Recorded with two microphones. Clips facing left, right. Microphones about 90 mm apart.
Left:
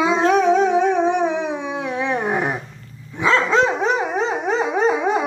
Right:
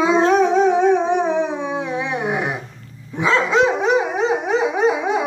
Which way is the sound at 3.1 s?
15° right (ahead or behind).